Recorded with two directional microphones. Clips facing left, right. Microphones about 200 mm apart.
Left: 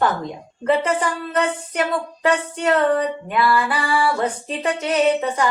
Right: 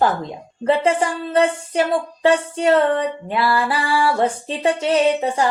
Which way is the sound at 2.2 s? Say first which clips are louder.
Right 3 dB; 30° right (ahead or behind).